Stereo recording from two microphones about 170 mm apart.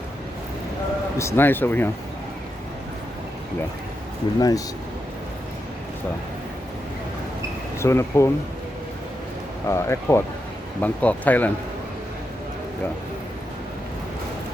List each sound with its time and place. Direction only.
1.2 s speech: 15° left (ahead or behind)
4.4 s speech: 20° left (ahead or behind)
7.8 s speech: 15° left (ahead or behind)
9.6 s speech: 15° left (ahead or behind)